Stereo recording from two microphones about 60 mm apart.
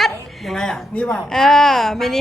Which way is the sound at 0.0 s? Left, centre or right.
Centre.